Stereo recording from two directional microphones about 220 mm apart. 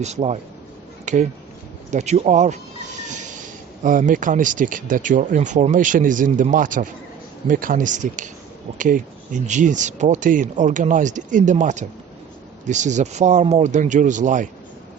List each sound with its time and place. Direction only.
0.0 s speech: 30° right (ahead or behind)
3.8 s speech: 35° right (ahead or behind)